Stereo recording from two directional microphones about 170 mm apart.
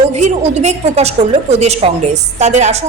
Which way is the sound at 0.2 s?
40° right (ahead or behind).